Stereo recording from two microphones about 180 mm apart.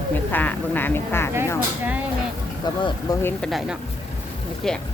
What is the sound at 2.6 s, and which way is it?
Speech, 25° left (ahead or behind).